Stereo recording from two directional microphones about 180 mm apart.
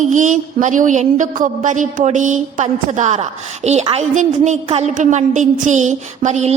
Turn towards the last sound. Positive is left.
turn(degrees=-40)  # may be behind; listen again after turning